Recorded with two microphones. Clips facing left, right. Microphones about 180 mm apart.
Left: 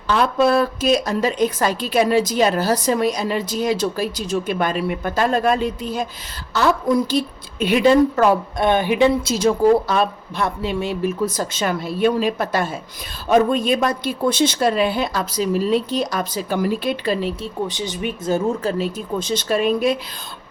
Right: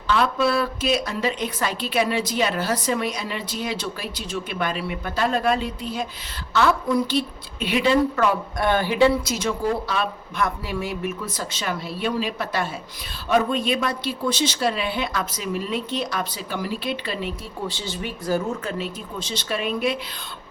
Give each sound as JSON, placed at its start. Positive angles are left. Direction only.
{"t": 0.1, "sound": "a woman's voice", "side_deg": 45}
{"t": 8.5, "sound": "speech", "side_deg": 20}
{"t": 9.3, "sound": "a woman's voice", "side_deg": 40}
{"t": 10.4, "sound": "speech", "side_deg": 25}
{"t": 11.3, "sound": "a woman's voice", "side_deg": 45}
{"t": 17.7, "sound": "speech", "side_deg": 15}
{"t": 18.8, "sound": "a woman's voice", "side_deg": 45}